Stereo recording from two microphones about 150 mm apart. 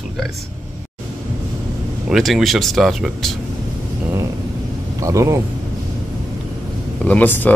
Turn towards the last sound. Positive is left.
turn(degrees=10)  # may be behind; listen again after turning